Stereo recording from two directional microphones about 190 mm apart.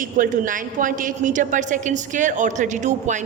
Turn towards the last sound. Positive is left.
turn(degrees=-40)  # may be behind; listen again after turning